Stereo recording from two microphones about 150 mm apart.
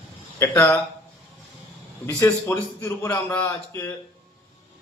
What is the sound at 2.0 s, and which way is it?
A man's voice, 15° left (ahead or behind).